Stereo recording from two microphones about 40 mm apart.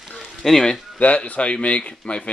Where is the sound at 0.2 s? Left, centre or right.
Centre.